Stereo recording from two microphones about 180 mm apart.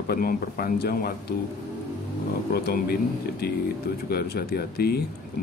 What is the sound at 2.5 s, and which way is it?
Speech, 60° left (ahead or behind).